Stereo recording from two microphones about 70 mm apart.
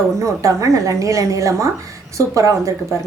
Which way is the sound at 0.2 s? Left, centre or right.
Right.